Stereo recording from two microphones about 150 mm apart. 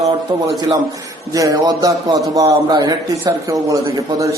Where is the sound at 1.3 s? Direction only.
25° right (ahead or behind).